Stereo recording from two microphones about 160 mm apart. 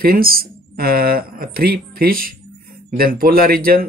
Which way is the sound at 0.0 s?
65° right (ahead or behind).